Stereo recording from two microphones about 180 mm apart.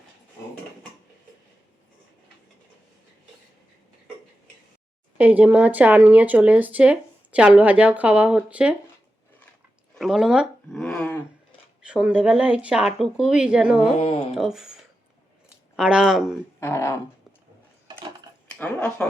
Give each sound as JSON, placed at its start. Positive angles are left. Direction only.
{"t": 5.1, "sound": "speech", "side_deg": -10}
{"t": 9.9, "sound": "a sound", "side_deg": 0}
{"t": 11.8, "sound": "speech", "side_deg": -5}
{"t": 14.0, "sound": "a sound", "side_deg": 35}
{"t": 14.3, "sound": "speech", "side_deg": -5}
{"t": 16.6, "sound": "speech", "side_deg": 15}
{"t": 18.6, "sound": "speech", "side_deg": 5}